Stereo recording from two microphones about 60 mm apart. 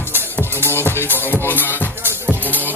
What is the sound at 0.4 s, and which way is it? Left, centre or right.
Music, left.